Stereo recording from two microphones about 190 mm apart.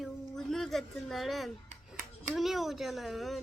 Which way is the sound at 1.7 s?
40° right (ahead or behind).